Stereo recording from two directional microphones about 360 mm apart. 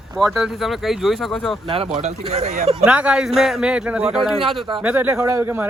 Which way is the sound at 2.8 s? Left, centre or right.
Centre.